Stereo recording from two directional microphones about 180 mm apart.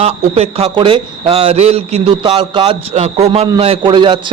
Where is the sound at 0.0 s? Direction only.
35° right (ahead or behind).